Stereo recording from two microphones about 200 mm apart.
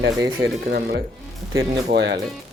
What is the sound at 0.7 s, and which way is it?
Speech, 55° right (ahead or behind).